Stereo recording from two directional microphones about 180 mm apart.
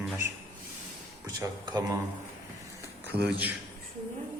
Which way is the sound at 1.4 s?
20° right (ahead or behind).